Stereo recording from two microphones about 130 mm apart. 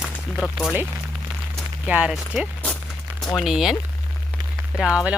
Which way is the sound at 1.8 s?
10° right (ahead or behind).